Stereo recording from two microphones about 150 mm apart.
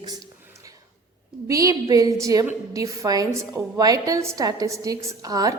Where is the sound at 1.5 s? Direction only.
20° right (ahead or behind).